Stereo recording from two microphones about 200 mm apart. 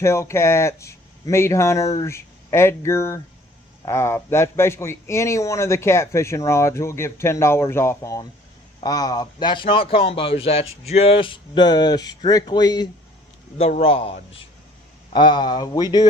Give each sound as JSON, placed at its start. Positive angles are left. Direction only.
{"t": 0.0, "sound": "speech", "side_deg": 15}
{"t": 13.6, "sound": "speech", "side_deg": 30}